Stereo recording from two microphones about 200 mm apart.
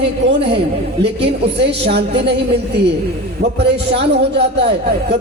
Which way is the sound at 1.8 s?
55° right (ahead or behind).